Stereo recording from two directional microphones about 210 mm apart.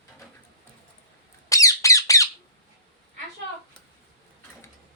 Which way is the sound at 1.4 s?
15° left (ahead or behind).